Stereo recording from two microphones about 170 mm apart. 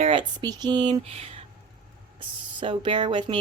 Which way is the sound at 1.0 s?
35° right (ahead or behind).